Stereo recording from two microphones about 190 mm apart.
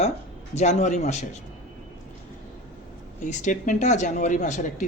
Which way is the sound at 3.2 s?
40° left (ahead or behind).